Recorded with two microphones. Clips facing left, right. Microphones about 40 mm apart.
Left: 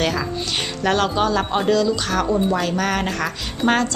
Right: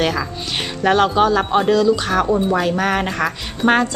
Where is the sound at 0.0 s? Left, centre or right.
Centre.